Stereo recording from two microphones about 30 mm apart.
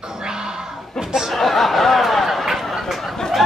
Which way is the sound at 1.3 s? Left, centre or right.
Centre.